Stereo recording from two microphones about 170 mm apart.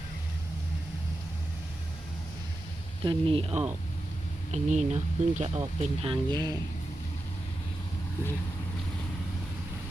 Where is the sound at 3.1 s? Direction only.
30° right (ahead or behind).